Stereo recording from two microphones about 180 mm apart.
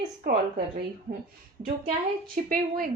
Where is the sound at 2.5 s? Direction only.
50° right (ahead or behind).